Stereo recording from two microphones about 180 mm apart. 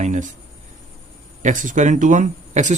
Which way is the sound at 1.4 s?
45° right (ahead or behind).